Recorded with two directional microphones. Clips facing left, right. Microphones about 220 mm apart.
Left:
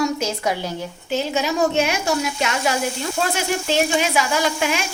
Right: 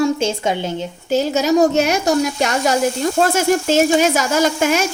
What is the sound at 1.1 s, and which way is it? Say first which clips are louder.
Speech: right 7 dB; 40° right (ahead or behind).